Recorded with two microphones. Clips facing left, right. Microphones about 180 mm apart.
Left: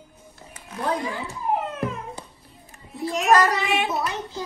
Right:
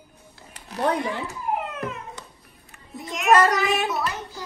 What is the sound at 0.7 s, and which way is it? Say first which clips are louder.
Speech: right 2 dB; 65° right (ahead or behind).